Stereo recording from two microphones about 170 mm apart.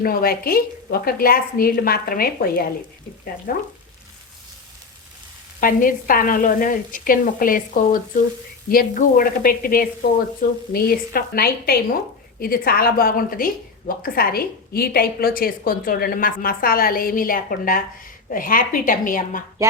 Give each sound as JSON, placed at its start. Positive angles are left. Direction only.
{"t": 0.0, "sound": "a woman's voice", "side_deg": 60}
{"t": 5.5, "sound": "a woman's voice", "side_deg": 55}